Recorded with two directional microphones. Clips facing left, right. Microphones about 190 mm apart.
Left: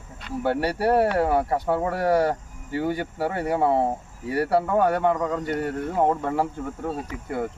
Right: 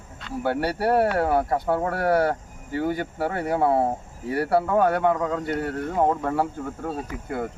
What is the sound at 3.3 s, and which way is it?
Speech, 10° left (ahead or behind).